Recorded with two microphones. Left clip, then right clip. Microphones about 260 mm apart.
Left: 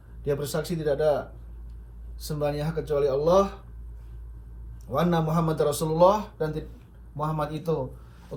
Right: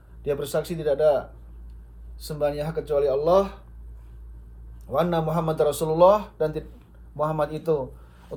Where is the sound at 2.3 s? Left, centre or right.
Right.